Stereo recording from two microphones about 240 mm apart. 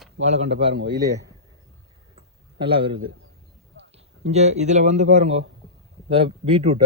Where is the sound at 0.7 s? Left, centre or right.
Right.